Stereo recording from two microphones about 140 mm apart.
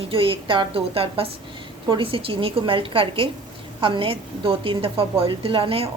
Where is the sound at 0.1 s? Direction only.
40° right (ahead or behind).